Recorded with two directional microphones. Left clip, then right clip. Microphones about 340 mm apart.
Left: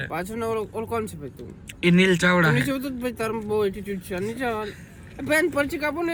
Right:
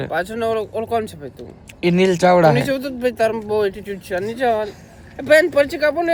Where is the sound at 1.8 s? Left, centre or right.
Centre.